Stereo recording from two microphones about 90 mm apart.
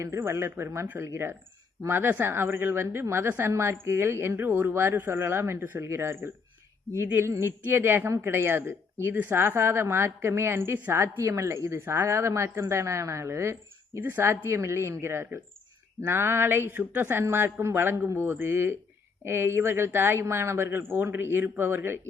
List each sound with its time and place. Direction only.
0.0 s a woman's voice: 30° right (ahead or behind)